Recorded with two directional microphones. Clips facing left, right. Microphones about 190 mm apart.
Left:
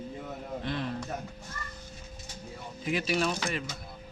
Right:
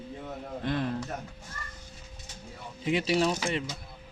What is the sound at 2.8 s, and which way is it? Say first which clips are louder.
Speech: right 3 dB; 25° right (ahead or behind).